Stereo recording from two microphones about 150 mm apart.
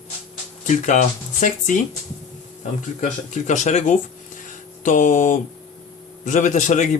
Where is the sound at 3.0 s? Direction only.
55° left (ahead or behind).